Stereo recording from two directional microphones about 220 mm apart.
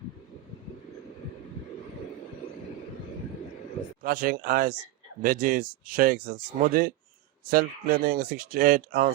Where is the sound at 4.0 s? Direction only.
40° right (ahead or behind).